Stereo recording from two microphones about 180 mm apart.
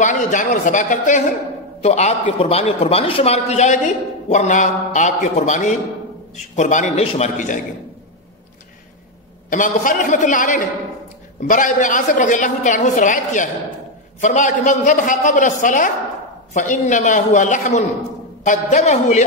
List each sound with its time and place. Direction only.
0.0 s a woman's voice: 45° left (ahead or behind)
9.5 s a woman's voice: 45° left (ahead or behind)